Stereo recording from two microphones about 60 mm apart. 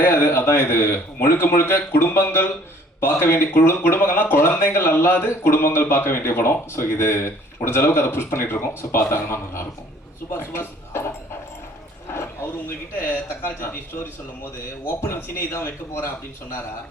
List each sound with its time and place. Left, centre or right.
0.0 s speech: left
12.1 s speech: left
14.8 s speech: left